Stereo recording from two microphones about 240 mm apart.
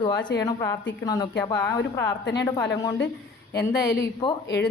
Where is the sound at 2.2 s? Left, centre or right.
Left.